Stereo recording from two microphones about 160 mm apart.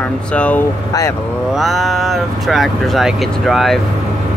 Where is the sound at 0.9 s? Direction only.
20° left (ahead or behind).